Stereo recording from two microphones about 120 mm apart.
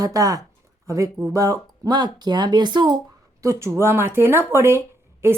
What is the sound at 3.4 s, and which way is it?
Speech, 25° right (ahead or behind).